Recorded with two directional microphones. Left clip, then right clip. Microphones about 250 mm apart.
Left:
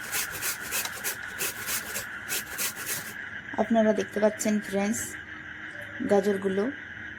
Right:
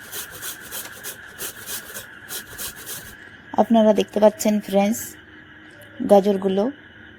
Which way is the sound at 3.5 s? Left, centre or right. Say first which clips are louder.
Right 8 dB; right.